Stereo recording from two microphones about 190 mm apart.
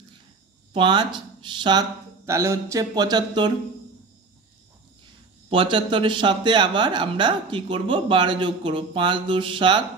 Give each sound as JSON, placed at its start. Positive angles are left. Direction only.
{"t": 0.7, "sound": "speech", "side_deg": -25}
{"t": 5.5, "sound": "speech", "side_deg": -25}